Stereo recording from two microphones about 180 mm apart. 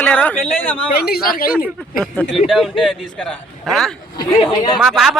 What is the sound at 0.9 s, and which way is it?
Speech, 60° left (ahead or behind).